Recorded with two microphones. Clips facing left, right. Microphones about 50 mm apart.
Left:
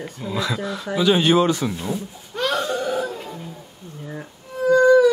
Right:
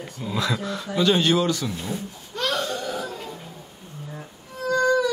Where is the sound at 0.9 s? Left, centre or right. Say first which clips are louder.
Left 3 dB; centre.